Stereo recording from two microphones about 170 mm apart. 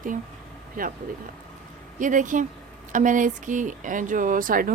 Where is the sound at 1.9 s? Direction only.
50° right (ahead or behind).